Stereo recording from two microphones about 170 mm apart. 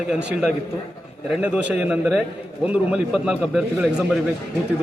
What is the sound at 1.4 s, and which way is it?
Speech, 10° right (ahead or behind).